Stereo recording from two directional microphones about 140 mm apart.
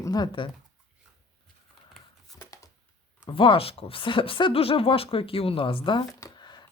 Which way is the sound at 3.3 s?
40° left (ahead or behind).